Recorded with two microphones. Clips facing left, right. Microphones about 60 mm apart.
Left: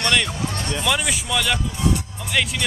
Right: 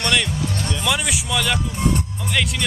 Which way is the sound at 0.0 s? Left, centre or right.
Centre.